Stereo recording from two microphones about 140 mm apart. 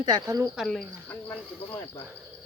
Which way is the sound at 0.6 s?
5° left (ahead or behind).